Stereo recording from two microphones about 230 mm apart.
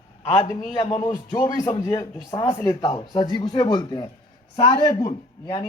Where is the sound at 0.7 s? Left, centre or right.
Centre.